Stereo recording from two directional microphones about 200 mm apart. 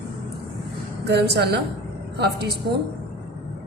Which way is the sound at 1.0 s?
55° right (ahead or behind).